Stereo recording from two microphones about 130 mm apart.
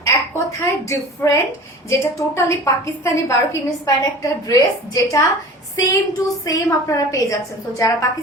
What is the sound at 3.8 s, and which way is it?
A woman's voice, 25° left (ahead or behind).